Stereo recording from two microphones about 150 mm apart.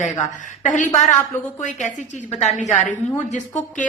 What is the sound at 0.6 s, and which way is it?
A woman's voice, 60° left (ahead or behind).